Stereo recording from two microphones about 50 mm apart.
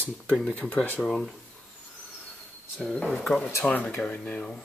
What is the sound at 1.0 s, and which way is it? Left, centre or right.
Speech, left.